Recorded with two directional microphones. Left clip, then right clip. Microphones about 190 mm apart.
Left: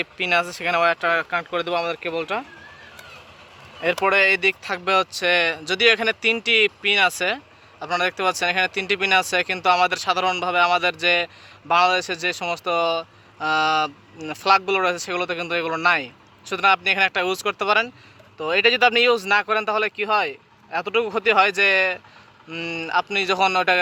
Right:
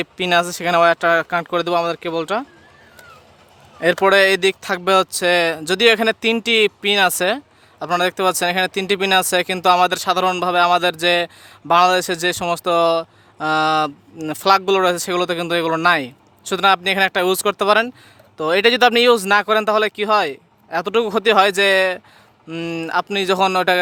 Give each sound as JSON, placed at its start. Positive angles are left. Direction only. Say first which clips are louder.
{"t": 0.0, "sound": "speech", "louder": "right 4 dB", "side_deg": -70}
{"t": 3.8, "sound": "speech", "louder": "right 5 dB", "side_deg": -75}